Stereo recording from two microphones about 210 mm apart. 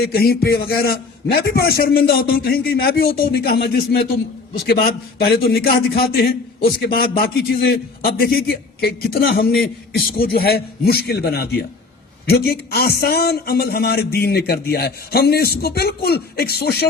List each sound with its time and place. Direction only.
0.0 s a man's voice: 45° left (ahead or behind)